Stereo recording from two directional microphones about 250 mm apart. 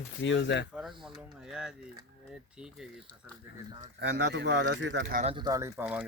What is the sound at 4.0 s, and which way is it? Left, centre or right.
Speech, right.